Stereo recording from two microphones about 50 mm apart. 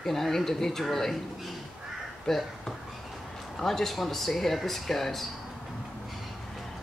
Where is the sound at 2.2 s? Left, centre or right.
Centre.